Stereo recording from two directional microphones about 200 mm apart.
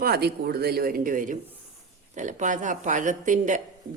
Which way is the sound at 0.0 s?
50° right (ahead or behind).